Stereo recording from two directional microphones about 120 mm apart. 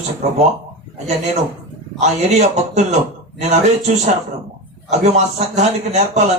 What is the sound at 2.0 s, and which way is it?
A man's voice, 70° right (ahead or behind).